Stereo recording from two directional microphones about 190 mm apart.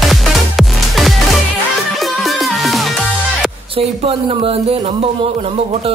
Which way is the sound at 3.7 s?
30° right (ahead or behind).